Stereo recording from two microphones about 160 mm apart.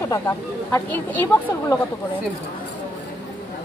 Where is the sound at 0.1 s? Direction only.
15° left (ahead or behind).